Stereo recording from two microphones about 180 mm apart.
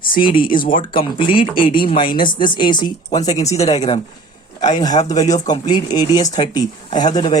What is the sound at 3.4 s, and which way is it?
Speech, 35° left (ahead or behind).